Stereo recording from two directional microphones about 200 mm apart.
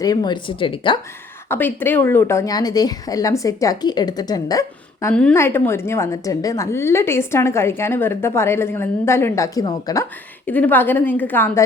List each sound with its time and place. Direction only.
0.0 s speech: 20° left (ahead or behind)
1.5 s a woman's voice: 10° left (ahead or behind)